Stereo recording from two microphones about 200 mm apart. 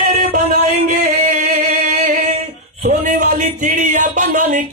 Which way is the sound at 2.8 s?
40° right (ahead or behind).